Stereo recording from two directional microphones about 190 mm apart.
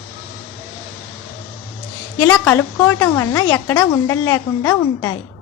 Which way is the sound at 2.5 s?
15° left (ahead or behind).